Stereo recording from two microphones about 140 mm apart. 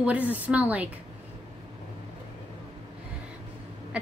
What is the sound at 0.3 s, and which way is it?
Speech, 10° right (ahead or behind).